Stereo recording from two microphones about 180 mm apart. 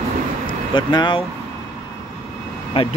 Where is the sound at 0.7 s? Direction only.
25° left (ahead or behind).